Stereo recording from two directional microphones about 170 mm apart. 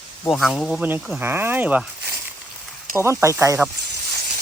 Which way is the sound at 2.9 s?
15° right (ahead or behind).